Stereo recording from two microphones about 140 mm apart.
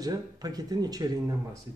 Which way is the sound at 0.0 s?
30° right (ahead or behind).